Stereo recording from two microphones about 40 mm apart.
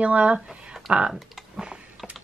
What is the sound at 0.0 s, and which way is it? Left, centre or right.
Speech, right.